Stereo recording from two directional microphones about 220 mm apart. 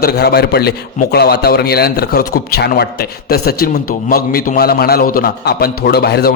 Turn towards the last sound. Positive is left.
turn(degrees=45)  # may be behind; listen again after turning